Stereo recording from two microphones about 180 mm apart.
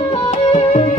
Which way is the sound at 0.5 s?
35° left (ahead or behind).